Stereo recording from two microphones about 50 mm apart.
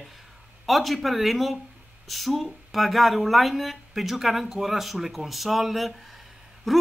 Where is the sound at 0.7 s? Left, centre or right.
Centre.